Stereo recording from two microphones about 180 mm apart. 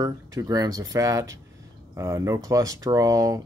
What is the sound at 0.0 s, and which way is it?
Speech, 20° right (ahead or behind).